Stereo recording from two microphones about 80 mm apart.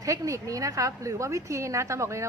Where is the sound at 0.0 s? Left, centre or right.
Right.